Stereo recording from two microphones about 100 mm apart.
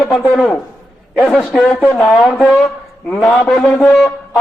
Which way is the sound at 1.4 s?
10° left (ahead or behind).